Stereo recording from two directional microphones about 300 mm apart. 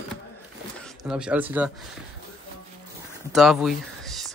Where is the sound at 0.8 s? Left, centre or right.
Centre.